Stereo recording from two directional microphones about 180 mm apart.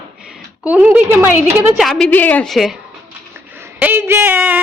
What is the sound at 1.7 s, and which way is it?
A woman's voice, centre (ahead or behind).